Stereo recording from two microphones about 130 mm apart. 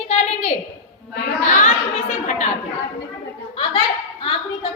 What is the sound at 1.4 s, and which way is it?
A woman's voice, 70° left (ahead or behind).